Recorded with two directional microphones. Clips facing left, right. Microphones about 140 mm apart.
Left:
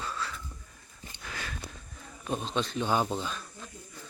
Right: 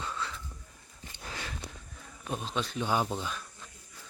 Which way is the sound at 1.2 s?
25° right (ahead or behind).